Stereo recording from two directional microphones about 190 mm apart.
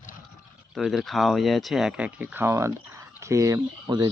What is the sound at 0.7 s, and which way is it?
Speech, centre (ahead or behind).